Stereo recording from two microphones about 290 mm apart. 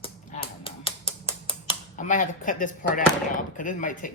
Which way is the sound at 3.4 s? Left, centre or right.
Left.